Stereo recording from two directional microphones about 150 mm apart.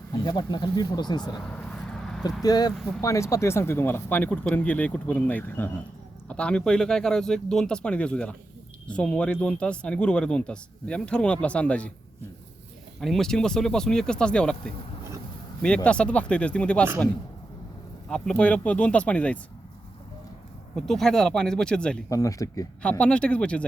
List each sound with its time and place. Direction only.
0.1 s speech: 30° left (ahead or behind)
1.4 s a sound: 5° left (ahead or behind)
2.4 s speech: 25° left (ahead or behind); by 11.9 s 10° left (ahead or behind)
13.0 s speech: centre (ahead or behind)
18.1 s speech: 5° left (ahead or behind)
20.7 s speech: centre (ahead or behind)
22.1 s speech: 20° left (ahead or behind)
22.8 s speech: 5° left (ahead or behind)